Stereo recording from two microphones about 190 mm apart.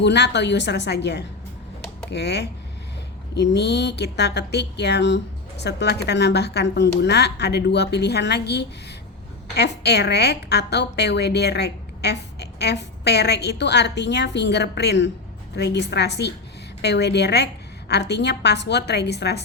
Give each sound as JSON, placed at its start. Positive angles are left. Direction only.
{"t": 0.0, "sound": "a woman's voice", "side_deg": 65}